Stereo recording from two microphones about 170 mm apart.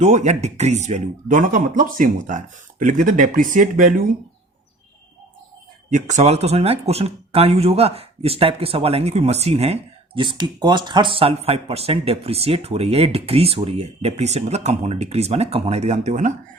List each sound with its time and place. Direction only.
0.0 s speech: 45° right (ahead or behind)
5.9 s speech: 45° right (ahead or behind)
10.2 s speech: 25° right (ahead or behind); by 16.3 s 45° right (ahead or behind)